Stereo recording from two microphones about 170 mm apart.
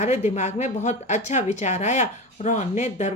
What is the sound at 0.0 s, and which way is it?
A woman's voice, 45° left (ahead or behind).